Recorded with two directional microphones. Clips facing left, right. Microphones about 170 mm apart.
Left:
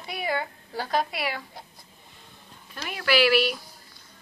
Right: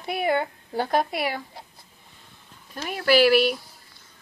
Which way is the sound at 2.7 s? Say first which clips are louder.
Right 4 dB; 40° right (ahead or behind).